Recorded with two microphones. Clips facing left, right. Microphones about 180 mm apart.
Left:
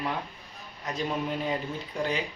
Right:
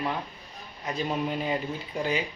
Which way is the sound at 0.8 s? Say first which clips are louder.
Right 1 dB; centre (ahead or behind).